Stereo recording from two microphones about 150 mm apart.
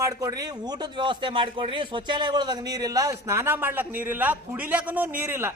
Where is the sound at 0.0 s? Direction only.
20° right (ahead or behind).